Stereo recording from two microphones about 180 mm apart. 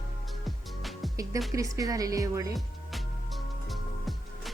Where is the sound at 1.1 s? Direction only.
20° right (ahead or behind).